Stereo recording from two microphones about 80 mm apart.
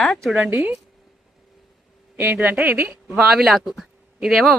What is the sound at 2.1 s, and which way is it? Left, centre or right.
Speech, right.